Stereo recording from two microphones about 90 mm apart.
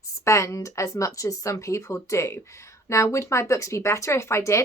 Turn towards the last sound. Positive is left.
turn(degrees=30)  # may be behind; listen again after turning